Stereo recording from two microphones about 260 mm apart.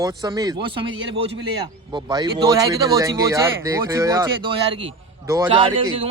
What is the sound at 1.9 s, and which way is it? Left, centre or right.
Speech, centre.